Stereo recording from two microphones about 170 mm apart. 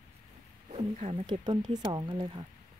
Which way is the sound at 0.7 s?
35° right (ahead or behind).